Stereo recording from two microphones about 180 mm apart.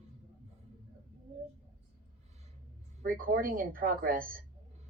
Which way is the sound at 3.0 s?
50° right (ahead or behind).